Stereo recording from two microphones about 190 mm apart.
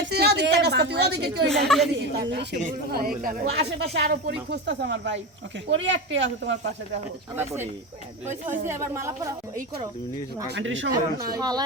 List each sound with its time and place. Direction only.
0.0 s a woman's voice: 60° right (ahead or behind)
1.5 s a woman's voice: centre (ahead or behind)
2.3 s speech: 65° right (ahead or behind)
2.6 s speech: 50° right (ahead or behind); by 6.6 s 70° right (ahead or behind)
7.3 s speech: 10° right (ahead or behind)
10.5 s speech: 80° right
11.3 s speech: 20° right (ahead or behind)